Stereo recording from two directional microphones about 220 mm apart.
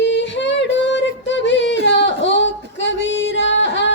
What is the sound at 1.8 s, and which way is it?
Female singing, 55° left (ahead or behind).